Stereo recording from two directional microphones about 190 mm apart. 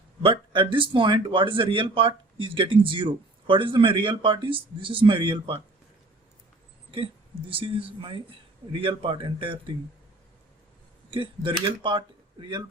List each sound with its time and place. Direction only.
0.2 s speech: 25° right (ahead or behind)
7.5 s speech: 30° right (ahead or behind)
11.1 s speech: 25° right (ahead or behind)